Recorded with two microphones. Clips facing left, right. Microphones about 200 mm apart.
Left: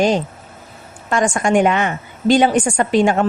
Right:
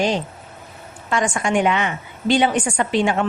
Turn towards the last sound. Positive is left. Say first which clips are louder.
# left 4 dB
turn(degrees=45)  # may be behind; listen again after turning